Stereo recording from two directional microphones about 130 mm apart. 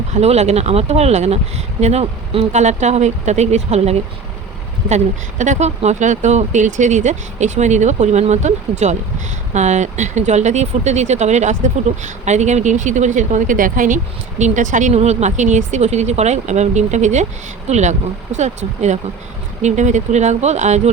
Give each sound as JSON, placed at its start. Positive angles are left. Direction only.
{"t": 0.1, "sound": "speech", "side_deg": -55}
{"t": 2.5, "sound": "speech", "side_deg": -60}
{"t": 4.9, "sound": "speech", "side_deg": -65}